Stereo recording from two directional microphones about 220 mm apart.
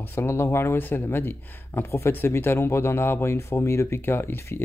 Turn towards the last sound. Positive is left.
turn(degrees=10)  # may be behind; listen again after turning